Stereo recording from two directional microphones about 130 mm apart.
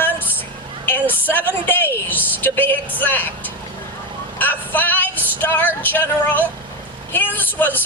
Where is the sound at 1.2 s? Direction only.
15° left (ahead or behind).